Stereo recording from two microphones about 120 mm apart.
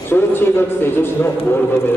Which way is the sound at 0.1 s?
20° left (ahead or behind).